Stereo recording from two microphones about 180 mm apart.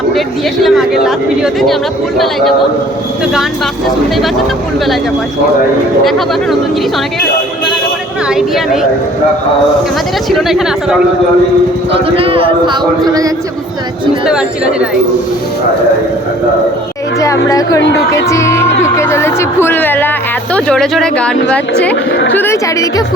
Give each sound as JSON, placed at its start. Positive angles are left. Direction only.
{"t": 0.6, "sound": "speech", "side_deg": 0}
{"t": 6.1, "sound": "speech", "side_deg": 0}
{"t": 8.3, "sound": "speech", "side_deg": 0}
{"t": 10.2, "sound": "speech", "side_deg": 0}
{"t": 11.9, "sound": "speech", "side_deg": -30}
{"t": 14.3, "sound": "speech", "side_deg": -5}
{"t": 17.5, "sound": "a woman's voice", "side_deg": 20}
{"t": 22.1, "sound": "a woman's voice", "side_deg": 80}
{"t": 22.4, "sound": "speech", "side_deg": 15}